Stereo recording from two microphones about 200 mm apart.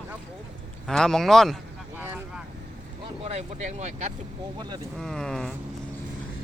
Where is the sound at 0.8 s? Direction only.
Centre (ahead or behind).